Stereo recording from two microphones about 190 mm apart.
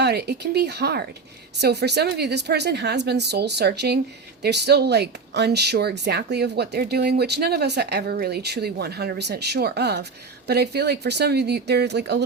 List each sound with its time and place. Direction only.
0.0 s speech: 60° right (ahead or behind)